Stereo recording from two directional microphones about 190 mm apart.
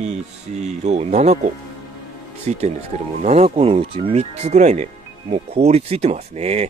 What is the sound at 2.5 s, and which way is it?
Speech, 35° right (ahead or behind).